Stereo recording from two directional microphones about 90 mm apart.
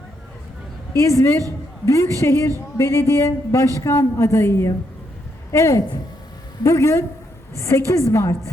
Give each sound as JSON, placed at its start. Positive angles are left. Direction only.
{"t": 0.9, "sound": "a woman's voice", "side_deg": 35}